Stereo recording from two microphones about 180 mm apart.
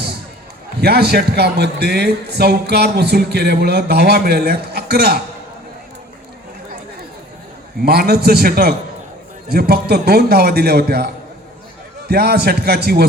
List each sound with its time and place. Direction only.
0.8 s a man's voice: 60° right (ahead or behind)
7.9 s a man's voice: 60° right (ahead or behind)